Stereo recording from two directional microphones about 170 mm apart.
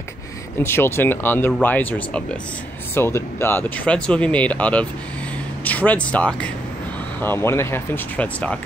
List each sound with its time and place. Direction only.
0.6 s speech: 15° left (ahead or behind)
5.6 s a sound: 10° left (ahead or behind)
6.1 s speech: 10° left (ahead or behind)